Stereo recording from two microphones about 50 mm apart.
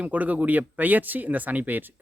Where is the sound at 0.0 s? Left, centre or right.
Right.